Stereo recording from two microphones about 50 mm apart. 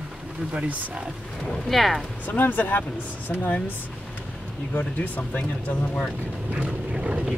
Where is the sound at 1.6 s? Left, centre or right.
Centre.